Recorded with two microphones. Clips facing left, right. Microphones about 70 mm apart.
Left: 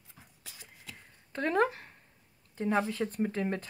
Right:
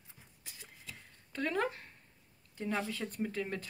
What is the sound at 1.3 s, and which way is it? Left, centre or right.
Speech, left.